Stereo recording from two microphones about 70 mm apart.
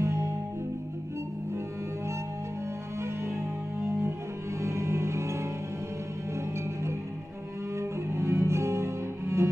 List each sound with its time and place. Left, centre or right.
0.0 s music: right
4.6 s music: right
8.1 s music: right